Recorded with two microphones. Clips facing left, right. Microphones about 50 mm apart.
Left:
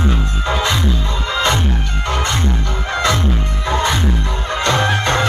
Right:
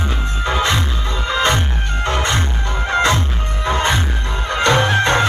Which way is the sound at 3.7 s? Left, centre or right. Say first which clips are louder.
Left 1 dB; right.